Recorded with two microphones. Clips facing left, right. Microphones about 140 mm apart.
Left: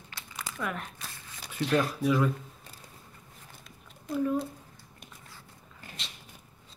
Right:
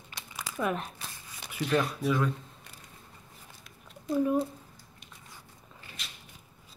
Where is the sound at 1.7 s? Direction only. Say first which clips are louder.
Left 1 dB; centre (ahead or behind).